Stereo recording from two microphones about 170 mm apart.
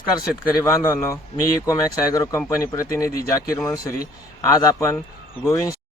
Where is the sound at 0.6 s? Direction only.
15° left (ahead or behind).